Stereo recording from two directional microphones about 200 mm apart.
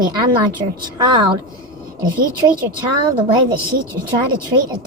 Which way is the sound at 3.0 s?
25° right (ahead or behind).